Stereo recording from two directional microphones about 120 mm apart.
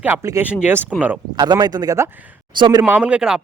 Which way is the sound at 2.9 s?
10° right (ahead or behind).